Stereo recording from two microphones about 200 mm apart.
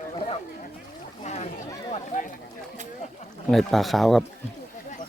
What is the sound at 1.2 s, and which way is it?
Speech, 35° left (ahead or behind).